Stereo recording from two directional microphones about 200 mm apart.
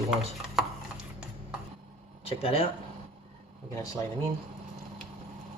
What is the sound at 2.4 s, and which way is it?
Speech, 30° left (ahead or behind).